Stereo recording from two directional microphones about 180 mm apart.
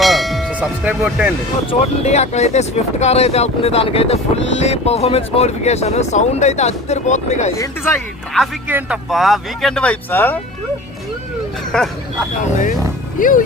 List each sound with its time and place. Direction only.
0.0 s a sound: centre (ahead or behind)
1.6 s speech: 40° left (ahead or behind)
7.6 s speech: 15° left (ahead or behind)
8.6 s speech: 10° right (ahead or behind); by 10.4 s 10° left (ahead or behind)
11.7 s speech: 5° left (ahead or behind)
13.1 s speech: 50° left (ahead or behind)